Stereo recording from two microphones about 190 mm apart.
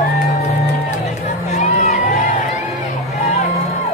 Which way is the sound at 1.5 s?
35° left (ahead or behind).